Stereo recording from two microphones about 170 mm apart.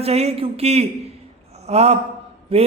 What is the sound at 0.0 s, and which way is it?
A man's voice, 40° right (ahead or behind).